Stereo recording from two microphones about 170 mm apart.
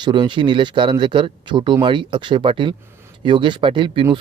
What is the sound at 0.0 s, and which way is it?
Speech, 25° right (ahead or behind).